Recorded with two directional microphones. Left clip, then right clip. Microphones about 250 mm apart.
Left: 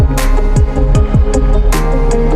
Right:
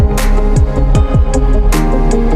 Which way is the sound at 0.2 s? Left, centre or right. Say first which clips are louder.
Even; centre.